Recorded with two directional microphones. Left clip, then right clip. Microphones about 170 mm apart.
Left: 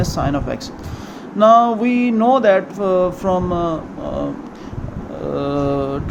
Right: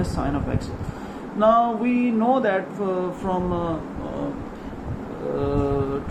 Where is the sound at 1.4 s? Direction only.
70° left (ahead or behind).